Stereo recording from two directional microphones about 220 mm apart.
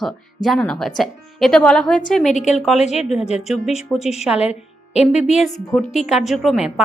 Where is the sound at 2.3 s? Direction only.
35° left (ahead or behind).